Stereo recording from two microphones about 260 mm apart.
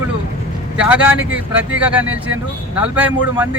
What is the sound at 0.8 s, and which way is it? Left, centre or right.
Speech, centre.